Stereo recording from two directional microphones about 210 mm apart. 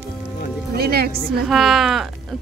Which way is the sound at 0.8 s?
50° right (ahead or behind).